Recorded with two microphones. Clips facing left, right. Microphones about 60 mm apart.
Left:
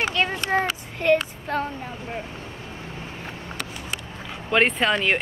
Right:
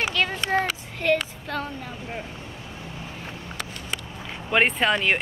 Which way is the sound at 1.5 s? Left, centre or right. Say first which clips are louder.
Left 4 dB; left.